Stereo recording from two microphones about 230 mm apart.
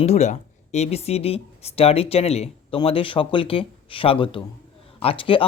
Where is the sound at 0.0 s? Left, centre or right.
Left.